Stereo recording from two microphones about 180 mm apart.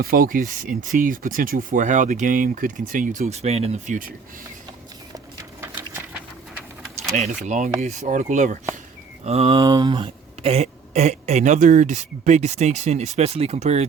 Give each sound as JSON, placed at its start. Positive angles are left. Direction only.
{"t": 0.0, "sound": "speech", "side_deg": -55}
{"t": 5.1, "sound": "a sound", "side_deg": -15}
{"t": 7.0, "sound": "speech", "side_deg": 0}
{"t": 7.4, "sound": "speech", "side_deg": -40}
{"t": 9.6, "sound": "speech", "side_deg": -25}